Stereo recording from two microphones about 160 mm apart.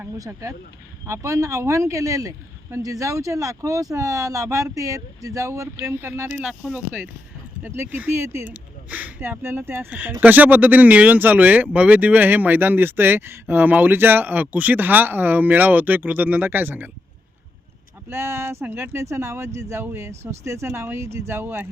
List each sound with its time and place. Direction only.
0.0 s speech: 20° right (ahead or behind)
18.1 s speech: 15° right (ahead or behind)